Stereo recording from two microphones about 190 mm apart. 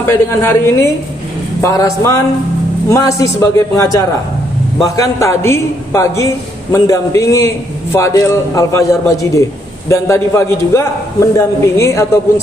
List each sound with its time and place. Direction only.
0.0 s a man's voice: 10° left (ahead or behind)